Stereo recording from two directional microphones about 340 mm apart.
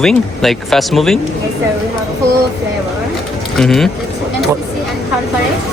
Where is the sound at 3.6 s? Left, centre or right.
Centre.